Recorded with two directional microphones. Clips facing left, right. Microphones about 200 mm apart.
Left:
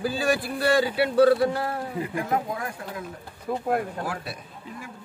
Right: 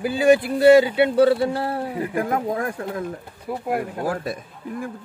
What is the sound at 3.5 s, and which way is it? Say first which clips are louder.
Speech: even; 10° right (ahead or behind).